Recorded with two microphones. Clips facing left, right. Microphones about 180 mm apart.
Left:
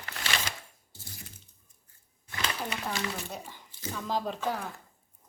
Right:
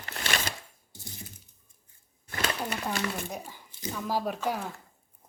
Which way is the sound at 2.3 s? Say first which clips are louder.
Right 3 dB; 55° right (ahead or behind).